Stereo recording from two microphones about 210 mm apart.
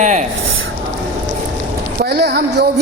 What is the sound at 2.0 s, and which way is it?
Speech, 50° right (ahead or behind).